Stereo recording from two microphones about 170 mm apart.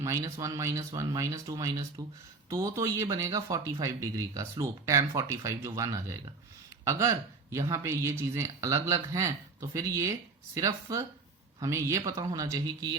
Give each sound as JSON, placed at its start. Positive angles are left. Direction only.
{"t": 0.0, "sound": "speech", "side_deg": -20}